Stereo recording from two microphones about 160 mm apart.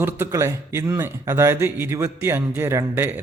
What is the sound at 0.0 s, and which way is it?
A man's voice, 15° right (ahead or behind).